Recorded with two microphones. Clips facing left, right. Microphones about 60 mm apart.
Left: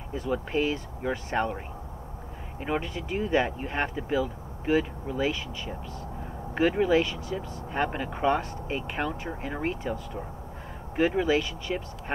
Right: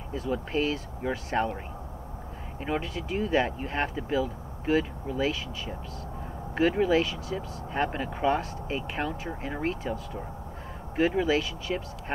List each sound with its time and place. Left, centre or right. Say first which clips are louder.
0.1 s speech: left 1 dB; centre
1.0 s speech: even; centre
2.6 s speech: left 1 dB; centre
11.0 s speech: left 1 dB; centre